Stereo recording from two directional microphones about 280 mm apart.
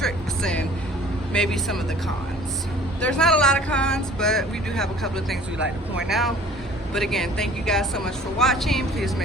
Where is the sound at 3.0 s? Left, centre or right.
Centre.